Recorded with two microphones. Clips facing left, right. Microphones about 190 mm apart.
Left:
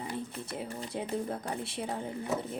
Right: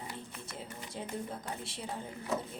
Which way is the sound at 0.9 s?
60° left (ahead or behind).